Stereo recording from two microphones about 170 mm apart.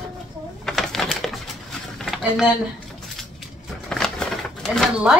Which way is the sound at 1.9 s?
Centre (ahead or behind).